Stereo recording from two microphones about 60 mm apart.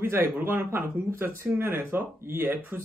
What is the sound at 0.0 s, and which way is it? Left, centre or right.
Speech, right.